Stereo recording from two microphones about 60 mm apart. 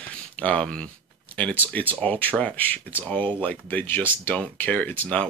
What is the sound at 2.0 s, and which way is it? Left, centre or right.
Speech, left.